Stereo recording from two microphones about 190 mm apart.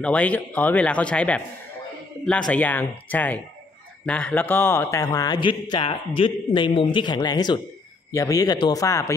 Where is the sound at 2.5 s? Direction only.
10° left (ahead or behind).